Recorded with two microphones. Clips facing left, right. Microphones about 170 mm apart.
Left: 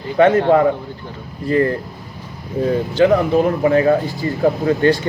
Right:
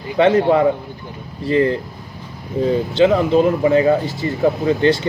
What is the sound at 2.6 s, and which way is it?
A man's voice, 25° right (ahead or behind).